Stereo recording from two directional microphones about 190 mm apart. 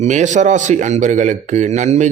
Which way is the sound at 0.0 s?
40° right (ahead or behind).